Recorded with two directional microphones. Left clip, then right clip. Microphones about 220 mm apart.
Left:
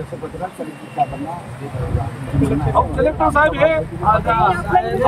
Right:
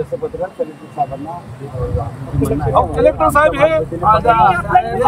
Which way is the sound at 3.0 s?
15° right (ahead or behind).